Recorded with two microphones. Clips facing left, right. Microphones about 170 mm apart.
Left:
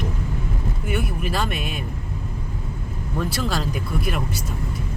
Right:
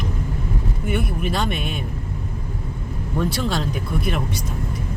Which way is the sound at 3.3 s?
5° left (ahead or behind).